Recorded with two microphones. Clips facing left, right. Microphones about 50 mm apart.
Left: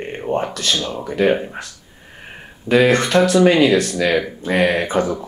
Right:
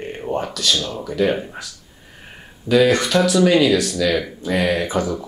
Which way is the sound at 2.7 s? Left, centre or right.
Left.